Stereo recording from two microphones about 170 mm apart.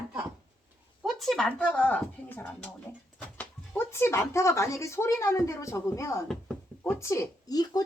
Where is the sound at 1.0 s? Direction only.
Centre (ahead or behind).